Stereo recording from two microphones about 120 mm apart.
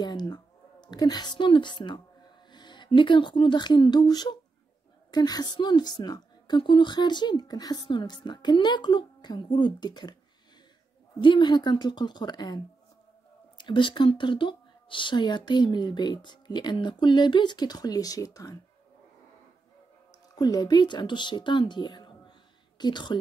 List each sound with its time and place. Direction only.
0.0 s a woman's voice: 35° left (ahead or behind)
11.1 s a woman's voice: 45° left (ahead or behind); by 18.6 s 30° left (ahead or behind)
20.3 s a woman's voice: 35° left (ahead or behind)